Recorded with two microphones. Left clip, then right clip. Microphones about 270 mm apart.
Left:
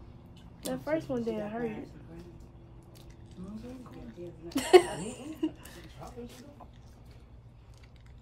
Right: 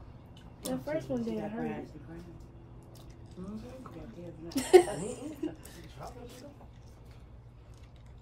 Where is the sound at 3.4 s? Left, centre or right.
Right.